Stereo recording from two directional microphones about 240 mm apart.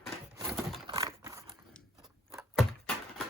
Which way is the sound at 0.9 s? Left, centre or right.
Centre.